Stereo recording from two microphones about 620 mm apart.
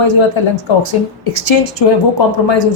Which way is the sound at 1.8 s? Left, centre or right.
Left.